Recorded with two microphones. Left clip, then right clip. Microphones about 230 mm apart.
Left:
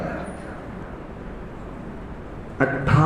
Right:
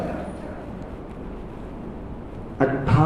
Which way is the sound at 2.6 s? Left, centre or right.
Left.